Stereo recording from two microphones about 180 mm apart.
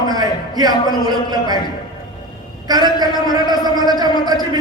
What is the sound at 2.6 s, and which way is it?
A man's voice, 20° right (ahead or behind).